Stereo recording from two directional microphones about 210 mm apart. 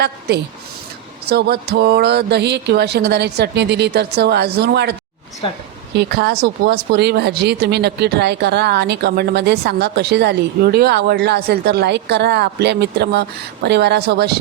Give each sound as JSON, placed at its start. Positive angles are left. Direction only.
{"t": 0.0, "sound": "speech", "side_deg": -50}
{"t": 6.0, "sound": "speech", "side_deg": -50}